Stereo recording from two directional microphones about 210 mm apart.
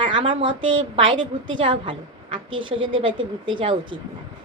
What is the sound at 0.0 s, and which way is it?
A woman's voice, 25° right (ahead or behind).